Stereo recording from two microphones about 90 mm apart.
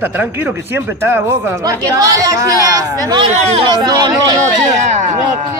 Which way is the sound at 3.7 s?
50° right (ahead or behind).